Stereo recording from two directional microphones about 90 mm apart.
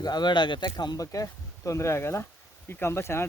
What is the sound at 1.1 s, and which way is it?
Speech, 35° left (ahead or behind).